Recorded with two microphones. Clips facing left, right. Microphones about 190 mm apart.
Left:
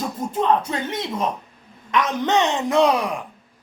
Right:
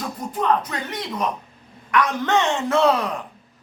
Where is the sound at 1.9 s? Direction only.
20° left (ahead or behind).